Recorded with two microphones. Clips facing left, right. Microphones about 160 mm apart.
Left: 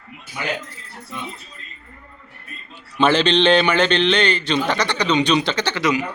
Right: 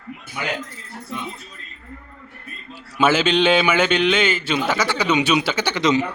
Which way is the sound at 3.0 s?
5° right (ahead or behind).